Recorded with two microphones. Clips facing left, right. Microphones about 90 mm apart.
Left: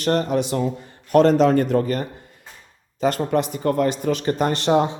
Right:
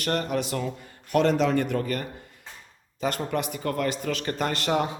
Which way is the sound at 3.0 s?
35° left (ahead or behind).